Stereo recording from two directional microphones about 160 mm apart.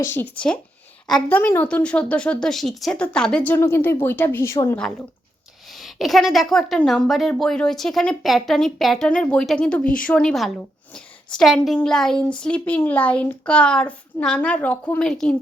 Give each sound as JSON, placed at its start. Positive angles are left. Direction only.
{"t": 0.0, "sound": "a woman's voice", "side_deg": 15}
{"t": 5.7, "sound": "a woman's voice", "side_deg": 0}